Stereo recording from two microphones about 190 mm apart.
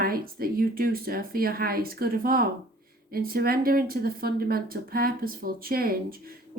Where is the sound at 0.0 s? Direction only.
50° right (ahead or behind).